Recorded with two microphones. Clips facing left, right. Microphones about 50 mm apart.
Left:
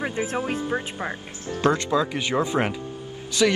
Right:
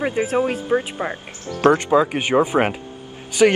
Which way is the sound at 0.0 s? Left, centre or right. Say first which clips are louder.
Right 7 dB; right.